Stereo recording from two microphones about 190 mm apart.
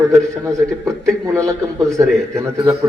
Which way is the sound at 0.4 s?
15° right (ahead or behind).